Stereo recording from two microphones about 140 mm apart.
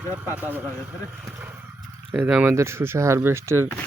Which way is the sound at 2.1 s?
10° right (ahead or behind).